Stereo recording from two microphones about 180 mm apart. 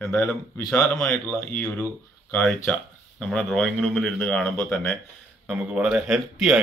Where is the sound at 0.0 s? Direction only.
15° left (ahead or behind).